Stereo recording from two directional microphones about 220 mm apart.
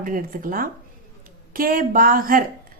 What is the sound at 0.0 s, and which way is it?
Speech, 40° right (ahead or behind).